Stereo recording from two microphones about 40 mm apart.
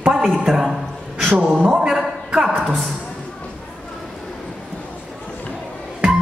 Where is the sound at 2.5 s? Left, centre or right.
Centre.